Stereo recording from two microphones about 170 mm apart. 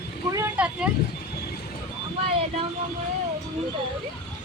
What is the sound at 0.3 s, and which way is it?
Vehicle, 15° right (ahead or behind).